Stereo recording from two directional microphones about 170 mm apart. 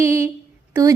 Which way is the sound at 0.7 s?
20° right (ahead or behind).